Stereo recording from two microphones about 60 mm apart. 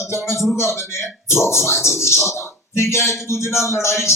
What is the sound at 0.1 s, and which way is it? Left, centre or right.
A man's voice, left.